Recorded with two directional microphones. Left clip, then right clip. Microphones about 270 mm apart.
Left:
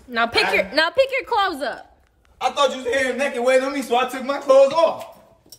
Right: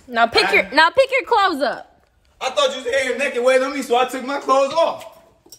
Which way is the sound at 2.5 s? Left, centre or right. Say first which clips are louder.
Right 2 dB; centre.